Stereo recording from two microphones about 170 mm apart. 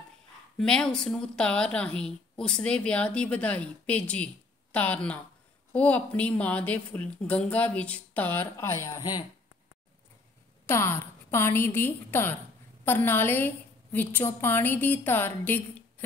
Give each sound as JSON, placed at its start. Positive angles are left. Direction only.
{"t": 0.6, "sound": "a woman's voice", "side_deg": 5}
{"t": 10.7, "sound": "a woman's voice", "side_deg": 15}